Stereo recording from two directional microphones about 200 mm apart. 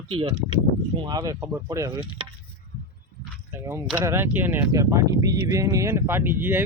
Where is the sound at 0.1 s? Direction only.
25° right (ahead or behind).